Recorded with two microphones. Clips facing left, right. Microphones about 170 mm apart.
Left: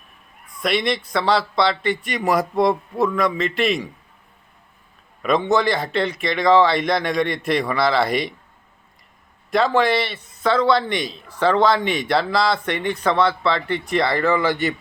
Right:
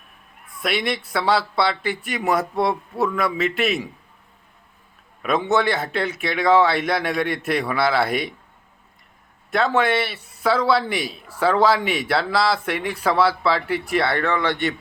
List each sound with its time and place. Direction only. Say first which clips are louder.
0.6 s a man's voice: left 3 dB; 5° right (ahead or behind)
5.2 s a man's voice: left 2 dB; 5° right (ahead or behind)
9.5 s a man's voice: left 2 dB; 5° right (ahead or behind)